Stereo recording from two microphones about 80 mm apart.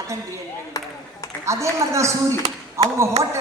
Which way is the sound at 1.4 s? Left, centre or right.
Right.